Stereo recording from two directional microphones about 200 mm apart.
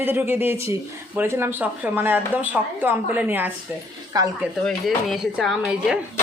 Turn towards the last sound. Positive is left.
turn(degrees=0)  # may be behind; listen again after turning